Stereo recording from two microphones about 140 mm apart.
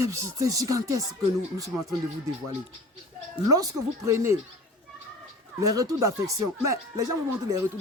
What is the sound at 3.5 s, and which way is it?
Speech, 25° right (ahead or behind).